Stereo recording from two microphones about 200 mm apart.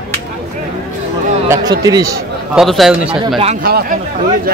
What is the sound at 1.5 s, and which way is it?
Speech, 20° right (ahead or behind).